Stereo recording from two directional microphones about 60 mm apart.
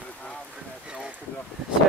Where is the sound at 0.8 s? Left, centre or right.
Centre.